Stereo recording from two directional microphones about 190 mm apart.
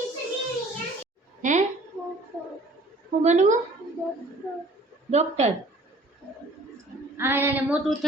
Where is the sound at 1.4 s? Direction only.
40° right (ahead or behind).